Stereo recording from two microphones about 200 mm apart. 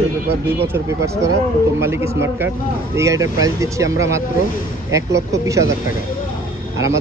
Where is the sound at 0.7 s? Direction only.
15° right (ahead or behind).